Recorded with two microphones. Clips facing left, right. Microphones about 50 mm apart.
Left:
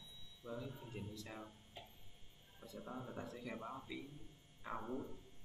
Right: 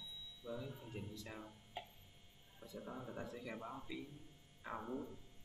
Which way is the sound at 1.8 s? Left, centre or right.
Right.